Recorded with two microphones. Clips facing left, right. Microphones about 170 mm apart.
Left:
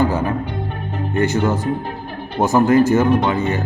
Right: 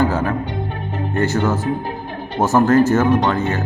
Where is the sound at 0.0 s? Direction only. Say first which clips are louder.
Even; 15° left (ahead or behind).